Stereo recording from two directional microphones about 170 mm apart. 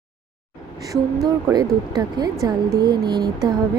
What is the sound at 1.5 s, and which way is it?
Speech, 20° right (ahead or behind).